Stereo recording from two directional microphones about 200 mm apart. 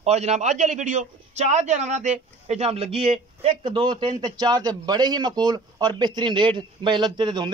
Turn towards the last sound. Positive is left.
turn(degrees=-20)  # may be behind; listen again after turning